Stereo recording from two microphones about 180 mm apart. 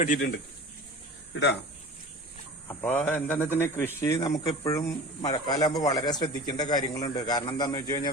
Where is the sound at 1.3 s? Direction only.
70° left (ahead or behind).